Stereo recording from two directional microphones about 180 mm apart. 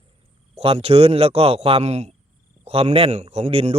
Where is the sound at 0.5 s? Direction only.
30° right (ahead or behind).